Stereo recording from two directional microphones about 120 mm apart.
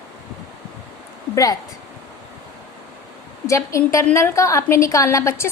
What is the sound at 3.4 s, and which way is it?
A woman's voice, 25° left (ahead or behind).